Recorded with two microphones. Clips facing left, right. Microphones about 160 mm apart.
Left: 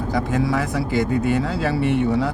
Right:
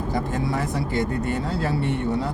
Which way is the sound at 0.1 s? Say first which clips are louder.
Left 5 dB; 90° left.